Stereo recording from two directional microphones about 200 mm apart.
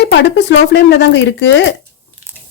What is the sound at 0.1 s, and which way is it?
Speech, 60° left (ahead or behind).